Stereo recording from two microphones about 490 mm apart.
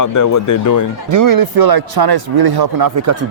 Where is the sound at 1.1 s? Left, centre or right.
Right.